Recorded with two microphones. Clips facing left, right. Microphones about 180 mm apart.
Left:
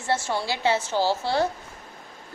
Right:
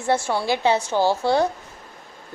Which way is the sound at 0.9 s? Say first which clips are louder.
Right 4 dB; 55° right (ahead or behind).